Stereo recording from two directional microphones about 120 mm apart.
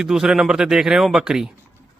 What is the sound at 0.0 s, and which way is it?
Speech, 5° right (ahead or behind).